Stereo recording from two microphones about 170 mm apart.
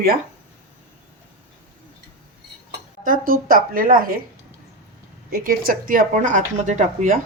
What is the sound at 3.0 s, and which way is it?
Speech, 55° right (ahead or behind).